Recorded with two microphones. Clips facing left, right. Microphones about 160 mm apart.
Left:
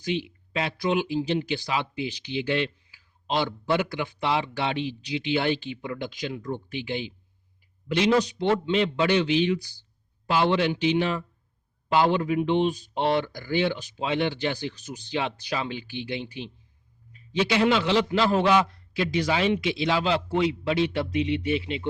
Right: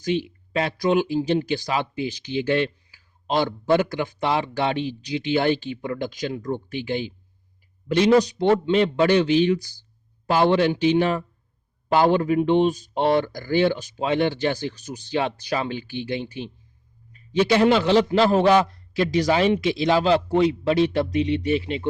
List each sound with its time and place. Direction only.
0.0 s a man's voice: 40° right (ahead or behind)